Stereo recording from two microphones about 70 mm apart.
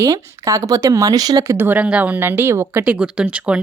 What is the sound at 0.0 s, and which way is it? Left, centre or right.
Speech, right.